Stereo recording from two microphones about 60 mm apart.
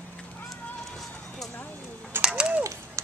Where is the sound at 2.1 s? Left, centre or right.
Right.